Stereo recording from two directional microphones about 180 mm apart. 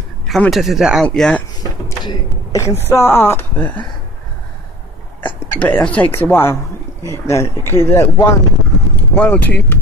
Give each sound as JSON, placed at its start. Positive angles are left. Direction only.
{"t": 0.3, "sound": "speech", "side_deg": 0}
{"t": 1.6, "sound": "door", "side_deg": 20}
{"t": 2.9, "sound": "speech", "side_deg": 15}
{"t": 5.5, "sound": "speech", "side_deg": 10}